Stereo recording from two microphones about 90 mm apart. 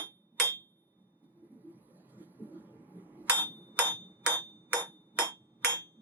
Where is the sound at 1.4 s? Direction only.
20° right (ahead or behind).